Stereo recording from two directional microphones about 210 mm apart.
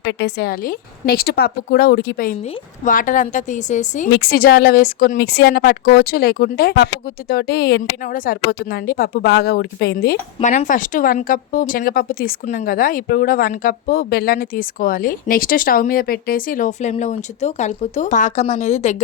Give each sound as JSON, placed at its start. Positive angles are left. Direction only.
{"t": 0.0, "sound": "a woman's voice", "side_deg": 55}
{"t": 4.1, "sound": "a woman's voice", "side_deg": 50}
{"t": 10.4, "sound": "speech", "side_deg": 35}